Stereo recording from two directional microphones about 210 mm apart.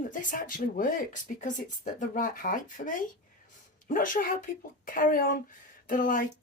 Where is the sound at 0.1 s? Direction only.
40° left (ahead or behind).